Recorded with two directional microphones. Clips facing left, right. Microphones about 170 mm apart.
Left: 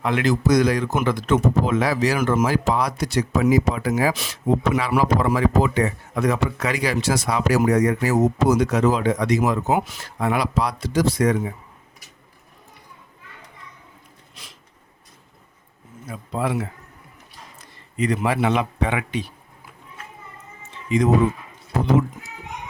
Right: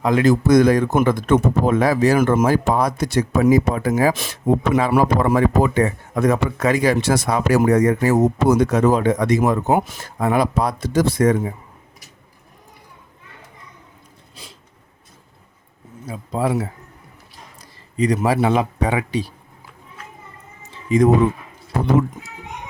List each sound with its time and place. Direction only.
0.0 s speech: 40° right (ahead or behind)
0.4 s speech: 55° right (ahead or behind)
16.0 s speech: 35° right (ahead or behind)
20.6 s a sound: 40° right (ahead or behind)